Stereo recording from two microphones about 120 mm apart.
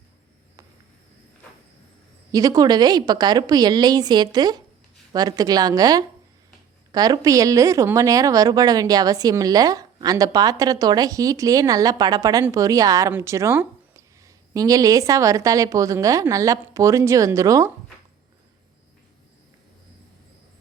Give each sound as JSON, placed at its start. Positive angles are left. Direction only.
{"t": 2.3, "sound": "a woman's voice", "side_deg": -30}